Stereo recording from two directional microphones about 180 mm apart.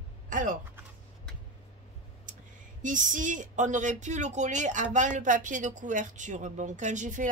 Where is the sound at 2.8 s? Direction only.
45° right (ahead or behind).